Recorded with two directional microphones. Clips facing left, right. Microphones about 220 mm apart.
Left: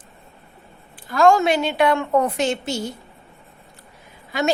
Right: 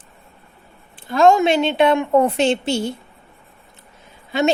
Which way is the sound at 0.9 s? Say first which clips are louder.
Right 2 dB; 25° right (ahead or behind).